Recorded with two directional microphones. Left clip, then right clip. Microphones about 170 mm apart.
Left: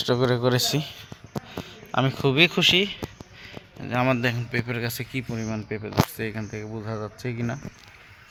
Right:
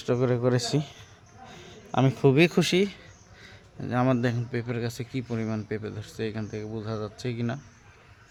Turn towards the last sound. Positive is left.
turn(degrees=0)  # may be behind; listen again after turning